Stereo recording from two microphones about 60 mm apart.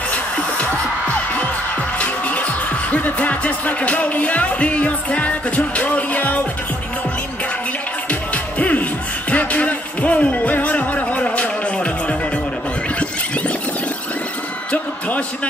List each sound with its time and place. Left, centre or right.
0.1 s music: left
2.0 s music: left
8.1 s music: left
14.7 s music: left